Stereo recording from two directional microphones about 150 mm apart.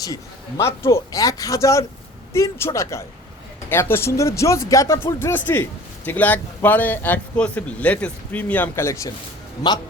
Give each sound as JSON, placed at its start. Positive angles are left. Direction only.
{"t": 0.0, "sound": "a man's voice", "side_deg": 25}